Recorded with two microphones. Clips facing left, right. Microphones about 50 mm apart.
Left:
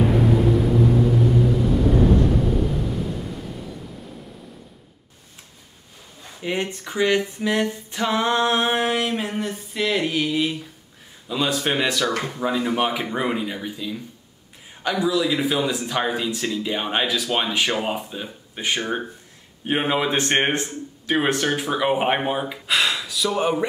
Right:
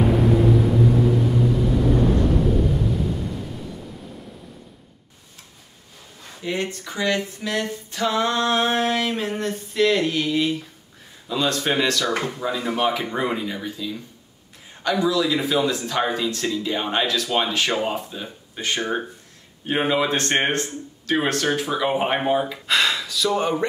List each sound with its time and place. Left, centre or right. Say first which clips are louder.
0.0 s vehicle: right 1 dB; centre
2.4 s a sound: right 2 dB; centre
6.4 s speech: left 1 dB; left